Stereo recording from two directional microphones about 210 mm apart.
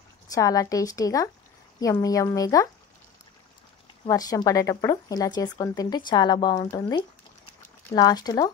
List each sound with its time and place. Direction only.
0.3 s a woman's voice: 15° left (ahead or behind)
4.0 s speech: 15° left (ahead or behind)